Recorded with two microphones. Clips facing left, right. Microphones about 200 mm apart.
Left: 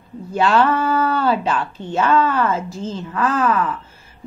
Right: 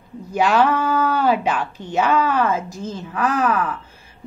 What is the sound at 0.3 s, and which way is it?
A woman's voice, 15° right (ahead or behind).